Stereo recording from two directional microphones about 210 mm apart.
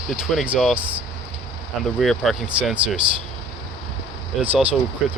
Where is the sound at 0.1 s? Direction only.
Centre (ahead or behind).